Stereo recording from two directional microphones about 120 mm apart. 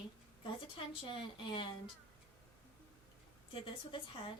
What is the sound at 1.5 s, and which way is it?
Speech, 45° left (ahead or behind).